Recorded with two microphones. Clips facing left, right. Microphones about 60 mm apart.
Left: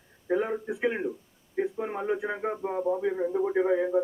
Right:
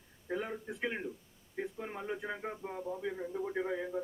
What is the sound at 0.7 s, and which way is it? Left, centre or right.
A man's voice, centre.